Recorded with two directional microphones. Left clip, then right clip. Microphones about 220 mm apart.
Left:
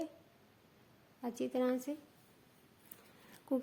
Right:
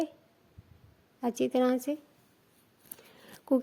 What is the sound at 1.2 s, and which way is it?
Speech, 35° right (ahead or behind).